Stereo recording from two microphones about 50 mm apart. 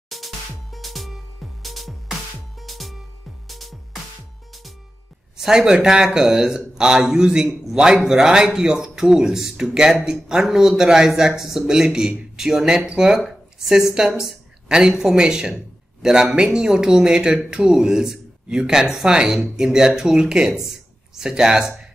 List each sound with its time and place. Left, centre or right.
0.1 s music: centre
5.4 s a woman's voice: centre